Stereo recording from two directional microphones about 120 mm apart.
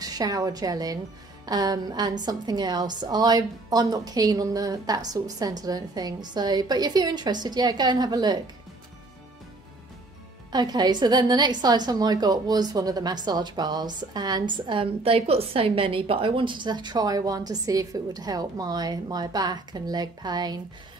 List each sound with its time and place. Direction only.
0.0 s a woman's voice: 30° right (ahead or behind)
10.5 s a woman's voice: 35° right (ahead or behind)